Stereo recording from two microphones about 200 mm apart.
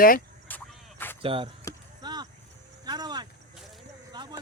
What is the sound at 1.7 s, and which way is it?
Chop, 15° left (ahead or behind).